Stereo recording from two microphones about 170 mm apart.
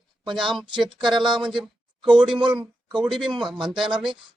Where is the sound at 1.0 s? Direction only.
Centre (ahead or behind).